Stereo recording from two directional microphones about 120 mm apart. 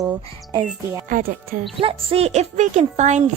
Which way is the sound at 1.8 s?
50° right (ahead or behind).